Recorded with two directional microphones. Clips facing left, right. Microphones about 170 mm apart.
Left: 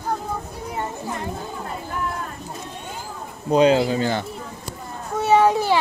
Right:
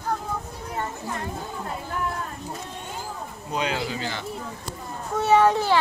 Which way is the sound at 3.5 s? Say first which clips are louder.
Left 12 dB; 35° left (ahead or behind).